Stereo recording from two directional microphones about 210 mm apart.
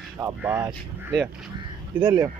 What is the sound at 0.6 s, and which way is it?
Speech, 20° right (ahead or behind).